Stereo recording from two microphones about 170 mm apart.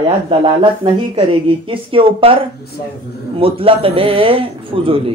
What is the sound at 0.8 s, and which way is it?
A woman's voice, 30° right (ahead or behind).